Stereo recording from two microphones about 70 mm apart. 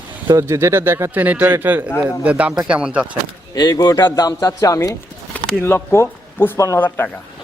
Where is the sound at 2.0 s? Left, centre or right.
Centre.